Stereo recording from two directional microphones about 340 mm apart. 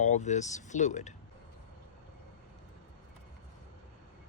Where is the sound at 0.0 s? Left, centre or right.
Left.